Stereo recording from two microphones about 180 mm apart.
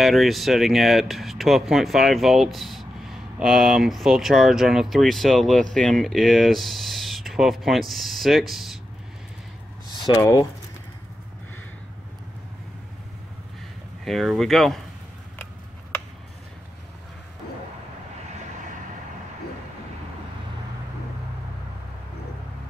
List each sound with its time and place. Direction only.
0.0 s speech: centre (ahead or behind)
10.1 s speech: 20° left (ahead or behind)
14.0 s speech: centre (ahead or behind)